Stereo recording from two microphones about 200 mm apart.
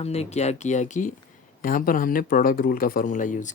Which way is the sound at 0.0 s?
30° left (ahead or behind).